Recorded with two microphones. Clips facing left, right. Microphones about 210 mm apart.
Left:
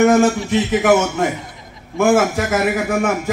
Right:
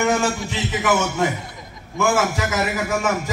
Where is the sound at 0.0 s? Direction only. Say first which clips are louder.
Left 8 dB; 50° left (ahead or behind).